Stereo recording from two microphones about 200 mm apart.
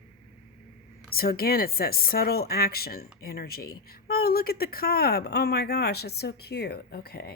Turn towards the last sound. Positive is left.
turn(degrees=50)  # may be behind; listen again after turning